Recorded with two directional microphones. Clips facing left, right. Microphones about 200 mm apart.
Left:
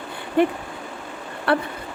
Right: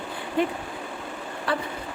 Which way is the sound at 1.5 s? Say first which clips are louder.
Left 7 dB; 65° left (ahead or behind).